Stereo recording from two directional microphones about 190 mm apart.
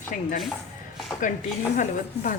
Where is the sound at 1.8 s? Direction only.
45° left (ahead or behind).